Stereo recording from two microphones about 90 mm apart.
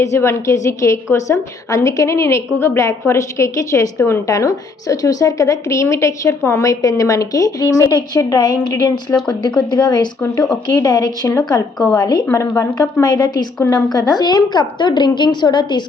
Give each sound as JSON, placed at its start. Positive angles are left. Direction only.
{"t": 0.0, "sound": "a woman's voice", "side_deg": 30}
{"t": 12.3, "sound": "a woman's voice", "side_deg": 35}